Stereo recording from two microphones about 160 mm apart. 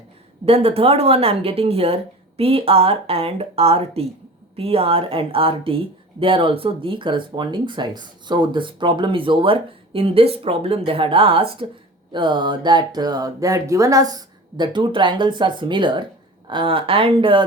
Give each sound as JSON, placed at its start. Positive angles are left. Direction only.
{"t": 0.4, "sound": "speech", "side_deg": -40}